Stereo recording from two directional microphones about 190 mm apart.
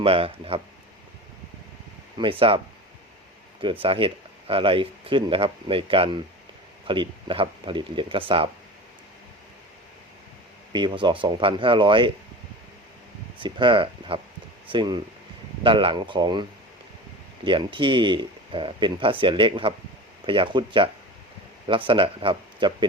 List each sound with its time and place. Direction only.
0.0 s speech: 30° right (ahead or behind)
2.2 s speech: 25° right (ahead or behind)
3.6 s speech: 25° right (ahead or behind)
10.7 s speech: 25° right (ahead or behind)
13.4 s speech: 25° right (ahead or behind)